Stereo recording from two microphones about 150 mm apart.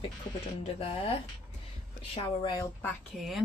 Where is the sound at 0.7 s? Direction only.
40° left (ahead or behind).